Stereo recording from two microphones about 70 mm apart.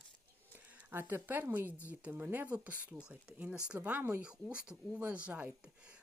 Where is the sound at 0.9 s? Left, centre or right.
Right.